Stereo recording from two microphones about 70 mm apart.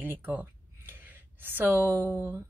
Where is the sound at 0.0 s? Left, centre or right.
Right.